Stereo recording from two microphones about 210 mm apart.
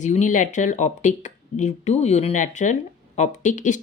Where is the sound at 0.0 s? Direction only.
35° left (ahead or behind).